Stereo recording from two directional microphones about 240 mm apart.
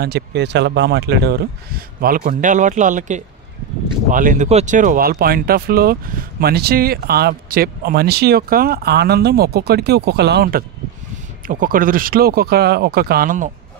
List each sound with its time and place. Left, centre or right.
0.0 s speech: right